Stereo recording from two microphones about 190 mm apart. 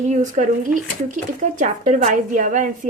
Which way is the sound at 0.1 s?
40° right (ahead or behind).